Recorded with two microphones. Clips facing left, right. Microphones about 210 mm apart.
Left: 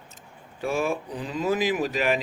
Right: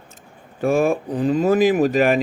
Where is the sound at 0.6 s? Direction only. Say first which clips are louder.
Right 8 dB; 50° right (ahead or behind).